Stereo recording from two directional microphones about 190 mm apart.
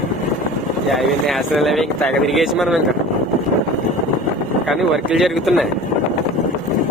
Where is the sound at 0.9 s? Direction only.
Centre (ahead or behind).